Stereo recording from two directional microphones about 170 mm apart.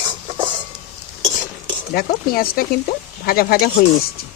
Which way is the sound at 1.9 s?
60° left (ahead or behind).